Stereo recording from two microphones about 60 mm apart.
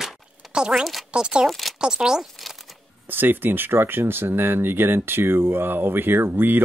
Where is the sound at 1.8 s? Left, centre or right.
Centre.